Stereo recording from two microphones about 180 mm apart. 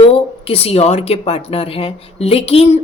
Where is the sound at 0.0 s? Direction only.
30° left (ahead or behind).